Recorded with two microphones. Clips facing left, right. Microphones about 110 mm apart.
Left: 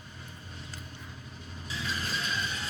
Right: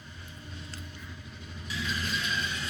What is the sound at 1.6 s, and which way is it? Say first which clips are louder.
Vehicle: right 1 dB; 35° left (ahead or behind).